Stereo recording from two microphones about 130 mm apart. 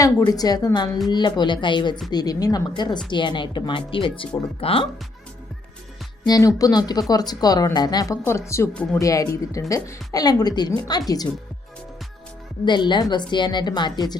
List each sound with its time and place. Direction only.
0.3 s a woman's voice: 30° left (ahead or behind)
6.2 s a woman's voice: 30° left (ahead or behind)
8.7 s speech: 10° left (ahead or behind)
9.0 s speech: 25° left (ahead or behind)
12.6 s a woman's voice: 35° left (ahead or behind)